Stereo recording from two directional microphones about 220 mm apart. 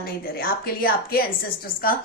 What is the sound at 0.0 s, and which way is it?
A woman's voice, 45° left (ahead or behind).